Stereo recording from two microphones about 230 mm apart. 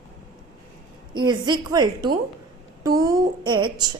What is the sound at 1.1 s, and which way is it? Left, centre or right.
Speech, centre.